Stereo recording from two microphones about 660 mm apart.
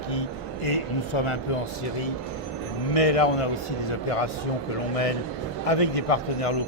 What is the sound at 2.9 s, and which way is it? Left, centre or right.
A man's voice, left.